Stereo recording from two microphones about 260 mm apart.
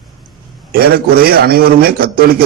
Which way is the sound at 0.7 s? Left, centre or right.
Right.